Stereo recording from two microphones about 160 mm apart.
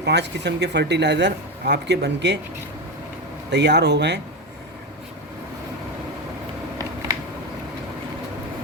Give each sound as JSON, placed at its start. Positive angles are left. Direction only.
{"t": 0.0, "sound": "speech", "side_deg": -90}
{"t": 3.5, "sound": "speech", "side_deg": -90}